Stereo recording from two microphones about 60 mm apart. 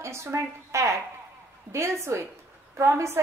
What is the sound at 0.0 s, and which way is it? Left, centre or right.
A woman's voice, right.